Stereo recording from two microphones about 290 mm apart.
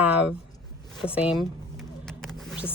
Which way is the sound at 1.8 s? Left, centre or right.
Centre.